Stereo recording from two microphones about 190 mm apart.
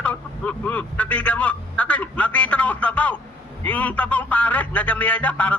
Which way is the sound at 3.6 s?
10° left (ahead or behind).